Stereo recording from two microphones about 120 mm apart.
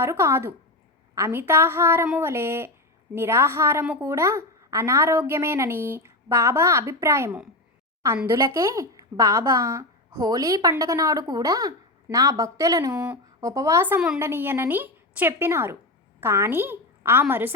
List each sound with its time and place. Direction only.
0.0 s a woman's voice: 20° right (ahead or behind)
13.8 s a woman's voice: 15° right (ahead or behind)